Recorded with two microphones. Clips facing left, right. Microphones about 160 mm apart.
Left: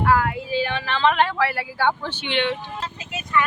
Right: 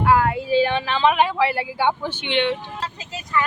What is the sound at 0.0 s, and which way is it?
Child singing, 20° right (ahead or behind).